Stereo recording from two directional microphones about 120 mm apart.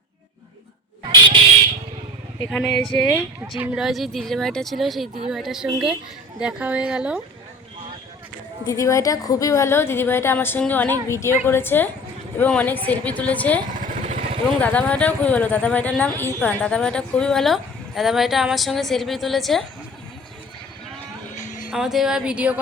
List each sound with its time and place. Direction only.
2.5 s a woman's voice: 5° left (ahead or behind)
3.6 s speech: 5° right (ahead or behind)
8.6 s a woman's voice: 25° left (ahead or behind)
13.7 s motorcycle: 80° right
14.6 s a woman's voice: 10° left (ahead or behind)
21.3 s music: 90° left
21.7 s speech: 5° right (ahead or behind)